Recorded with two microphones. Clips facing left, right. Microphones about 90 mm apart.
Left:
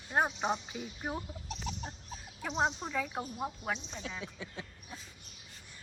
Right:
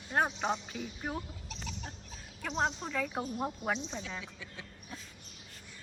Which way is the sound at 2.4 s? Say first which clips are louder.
Left 1 dB; 10° left (ahead or behind).